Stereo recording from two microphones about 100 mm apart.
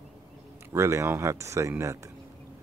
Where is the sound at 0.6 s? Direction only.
30° right (ahead or behind).